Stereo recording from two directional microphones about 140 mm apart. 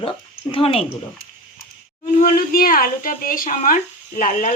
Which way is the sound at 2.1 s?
85° left.